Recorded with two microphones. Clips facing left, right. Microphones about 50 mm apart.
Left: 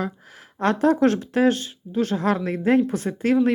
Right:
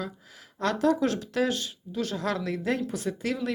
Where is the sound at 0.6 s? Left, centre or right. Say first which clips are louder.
Left 6 dB; left.